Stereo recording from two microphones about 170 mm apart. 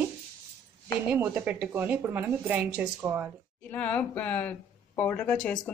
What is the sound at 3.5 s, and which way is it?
Speech, 10° left (ahead or behind).